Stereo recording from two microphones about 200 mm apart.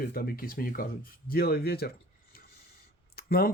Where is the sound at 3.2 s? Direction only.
50° left (ahead or behind).